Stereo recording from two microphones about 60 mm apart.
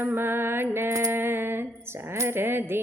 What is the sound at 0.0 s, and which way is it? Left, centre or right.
Music, right.